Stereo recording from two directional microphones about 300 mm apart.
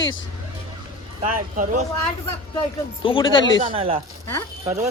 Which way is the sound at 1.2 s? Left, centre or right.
Right.